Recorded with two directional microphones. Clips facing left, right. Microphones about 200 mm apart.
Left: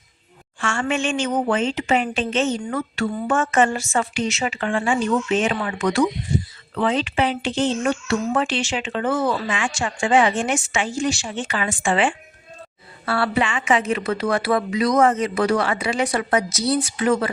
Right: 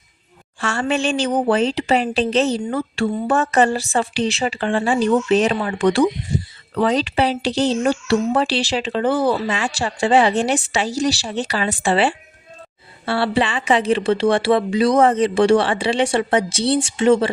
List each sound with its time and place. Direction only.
0.6 s speech: 35° right (ahead or behind)